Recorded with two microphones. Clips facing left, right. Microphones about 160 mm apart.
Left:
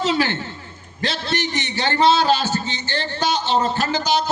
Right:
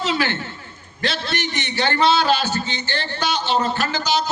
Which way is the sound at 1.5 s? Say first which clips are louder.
Right 2 dB; 35° left (ahead or behind).